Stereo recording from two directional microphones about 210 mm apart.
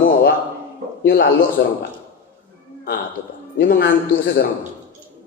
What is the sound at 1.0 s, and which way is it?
Speech, 45° left (ahead or behind).